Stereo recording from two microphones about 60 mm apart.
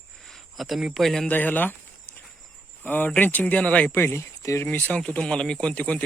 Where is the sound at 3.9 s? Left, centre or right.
Left.